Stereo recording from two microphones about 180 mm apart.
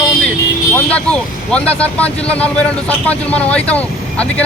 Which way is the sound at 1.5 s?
5° left (ahead or behind).